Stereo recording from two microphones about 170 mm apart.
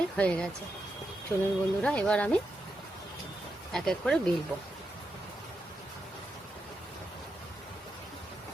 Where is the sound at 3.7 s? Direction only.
5° left (ahead or behind).